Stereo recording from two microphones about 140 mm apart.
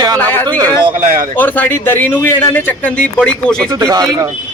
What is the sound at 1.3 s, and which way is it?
Speech, 10° left (ahead or behind).